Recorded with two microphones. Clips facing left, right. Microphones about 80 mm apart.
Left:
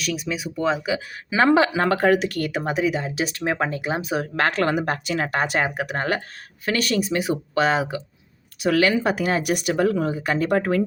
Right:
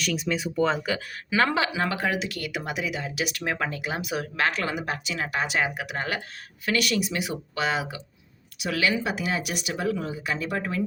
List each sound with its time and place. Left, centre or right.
0.0 s speech: centre
1.3 s speech: left
1.6 s speech: left
4.4 s speech: left